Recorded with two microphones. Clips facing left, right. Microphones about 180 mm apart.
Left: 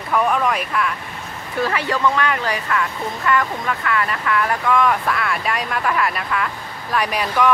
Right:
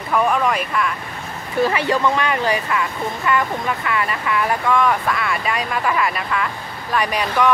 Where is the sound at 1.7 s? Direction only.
20° right (ahead or behind).